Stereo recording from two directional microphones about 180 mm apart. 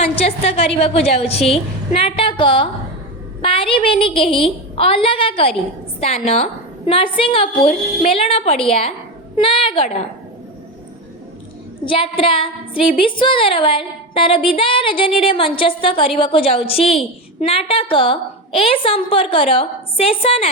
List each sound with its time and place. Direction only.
0.0 s a woman's voice: 35° left (ahead or behind)
11.9 s a woman's voice: 30° left (ahead or behind)